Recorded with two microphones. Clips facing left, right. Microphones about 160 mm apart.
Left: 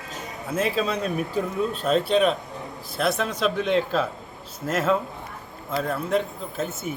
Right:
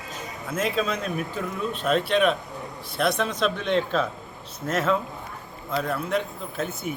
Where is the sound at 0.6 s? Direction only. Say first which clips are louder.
Left 1 dB; 35° left (ahead or behind).